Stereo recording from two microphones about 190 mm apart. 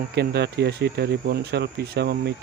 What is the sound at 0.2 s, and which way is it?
Speech, 60° right (ahead or behind).